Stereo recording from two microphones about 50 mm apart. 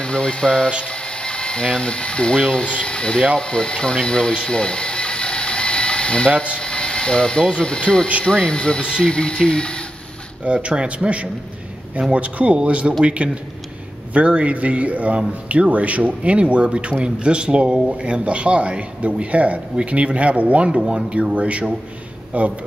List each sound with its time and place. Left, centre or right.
0.0 s speech: centre
10.4 s speech: right